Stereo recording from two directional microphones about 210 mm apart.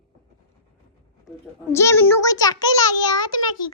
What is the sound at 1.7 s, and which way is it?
Child singing, 15° left (ahead or behind).